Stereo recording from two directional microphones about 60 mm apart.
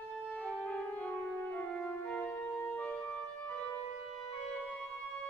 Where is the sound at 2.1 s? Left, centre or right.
Left.